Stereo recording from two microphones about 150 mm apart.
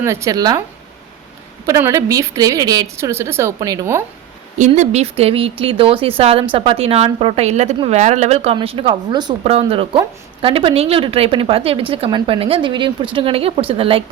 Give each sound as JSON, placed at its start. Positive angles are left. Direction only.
{"t": 0.0, "sound": "a woman's voice", "side_deg": -20}
{"t": 1.6, "sound": "a woman's voice", "side_deg": -20}
{"t": 4.5, "sound": "a woman's voice", "side_deg": -50}
{"t": 9.4, "sound": "a woman's voice", "side_deg": -40}